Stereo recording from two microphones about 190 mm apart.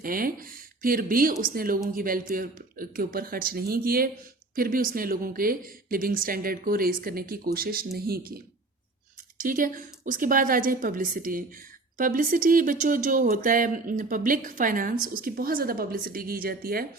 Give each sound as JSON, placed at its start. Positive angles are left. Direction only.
{"t": 0.0, "sound": "speech", "side_deg": -50}
{"t": 9.4, "sound": "speech", "side_deg": -45}